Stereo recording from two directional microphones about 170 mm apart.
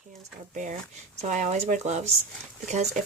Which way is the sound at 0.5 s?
45° right (ahead or behind).